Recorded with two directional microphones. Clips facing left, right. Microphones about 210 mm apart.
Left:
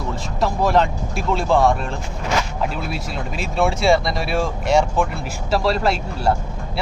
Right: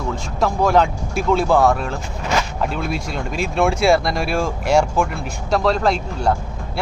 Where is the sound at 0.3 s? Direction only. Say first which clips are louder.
Right 2 dB; centre (ahead or behind).